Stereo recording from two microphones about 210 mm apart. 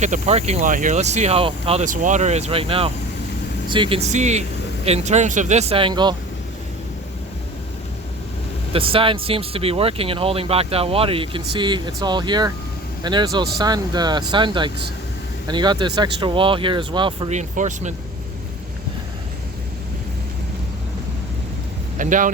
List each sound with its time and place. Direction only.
0.0 s speech: 35° right (ahead or behind)
8.7 s speech: 25° right (ahead or behind)
21.9 s speech: 40° right (ahead or behind)